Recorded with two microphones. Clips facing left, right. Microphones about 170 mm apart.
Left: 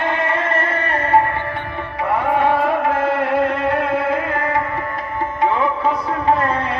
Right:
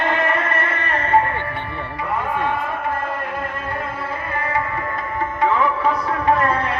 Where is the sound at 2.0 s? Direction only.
70° left (ahead or behind).